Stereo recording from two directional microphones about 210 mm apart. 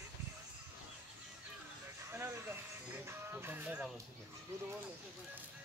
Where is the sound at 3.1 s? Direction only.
10° right (ahead or behind).